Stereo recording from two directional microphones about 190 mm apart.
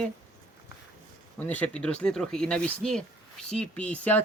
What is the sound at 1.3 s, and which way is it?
Speech, 10° left (ahead or behind).